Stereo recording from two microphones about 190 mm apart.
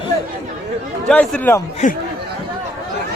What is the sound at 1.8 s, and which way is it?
Speech, 40° left (ahead or behind).